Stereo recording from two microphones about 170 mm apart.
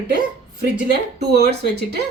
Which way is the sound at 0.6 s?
75° right (ahead or behind).